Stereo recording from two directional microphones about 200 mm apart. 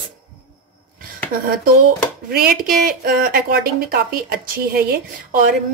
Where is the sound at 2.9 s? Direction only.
45° right (ahead or behind).